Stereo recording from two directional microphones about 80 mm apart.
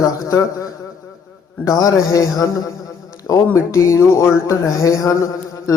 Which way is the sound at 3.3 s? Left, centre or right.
Left.